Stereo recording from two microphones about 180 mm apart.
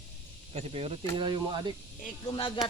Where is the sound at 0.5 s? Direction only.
35° right (ahead or behind).